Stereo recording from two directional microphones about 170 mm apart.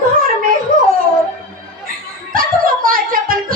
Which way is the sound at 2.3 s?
55° right (ahead or behind).